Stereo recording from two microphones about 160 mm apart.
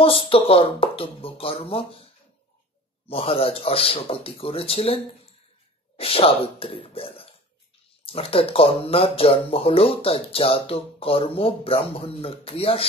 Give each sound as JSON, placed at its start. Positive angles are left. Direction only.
{"t": 0.3, "sound": "speech", "side_deg": 35}
{"t": 3.1, "sound": "speech", "side_deg": 35}